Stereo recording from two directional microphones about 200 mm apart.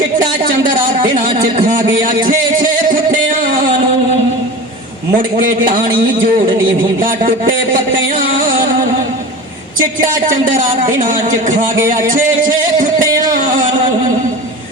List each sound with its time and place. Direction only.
0.2 s a sound: 45° right (ahead or behind)
1.4 s music: 40° right (ahead or behind)
5.1 s a man's voice: 40° right (ahead or behind)
8.2 s music: 45° right (ahead or behind)
9.8 s speech: 40° right (ahead or behind)
13.3 s music: 40° right (ahead or behind)